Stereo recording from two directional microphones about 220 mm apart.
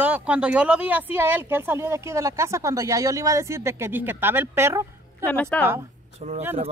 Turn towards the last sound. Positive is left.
turn(degrees=5)  # may be behind; listen again after turning